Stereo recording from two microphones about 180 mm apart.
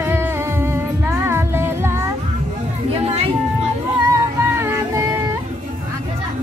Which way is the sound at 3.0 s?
35° right (ahead or behind).